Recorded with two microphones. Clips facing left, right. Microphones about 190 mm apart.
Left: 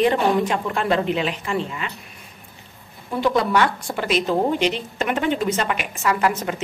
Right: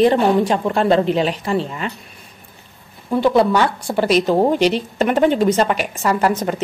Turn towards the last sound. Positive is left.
turn(degrees=-35)  # may be behind; listen again after turning